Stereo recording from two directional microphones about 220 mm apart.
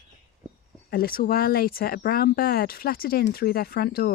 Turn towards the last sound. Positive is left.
turn(degrees=45)  # may be behind; listen again after turning